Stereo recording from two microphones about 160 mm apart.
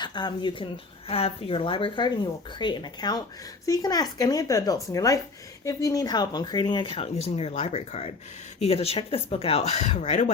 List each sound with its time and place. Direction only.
0.0 s speech: 25° left (ahead or behind); by 10.3 s 45° left (ahead or behind)